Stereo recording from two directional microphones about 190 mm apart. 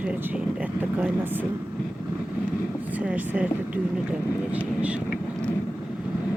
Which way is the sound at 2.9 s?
10° right (ahead or behind).